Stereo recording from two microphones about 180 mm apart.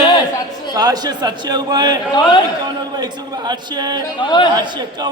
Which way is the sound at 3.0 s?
25° right (ahead or behind).